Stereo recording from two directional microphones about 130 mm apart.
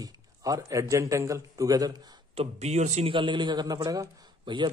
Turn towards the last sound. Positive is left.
turn(degrees=-35)  # may be behind; listen again after turning